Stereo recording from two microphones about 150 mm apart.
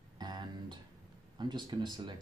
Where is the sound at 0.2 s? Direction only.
30° right (ahead or behind).